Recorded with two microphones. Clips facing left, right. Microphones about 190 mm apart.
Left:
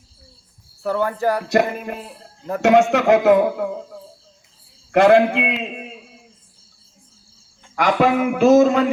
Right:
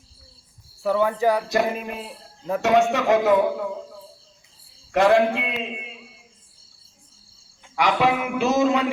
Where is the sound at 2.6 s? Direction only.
55° left (ahead or behind).